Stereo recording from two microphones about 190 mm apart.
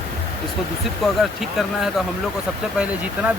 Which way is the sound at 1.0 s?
Centre (ahead or behind).